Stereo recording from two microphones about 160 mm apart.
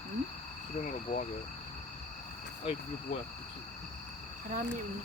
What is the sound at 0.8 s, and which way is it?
Speech, 50° left (ahead or behind).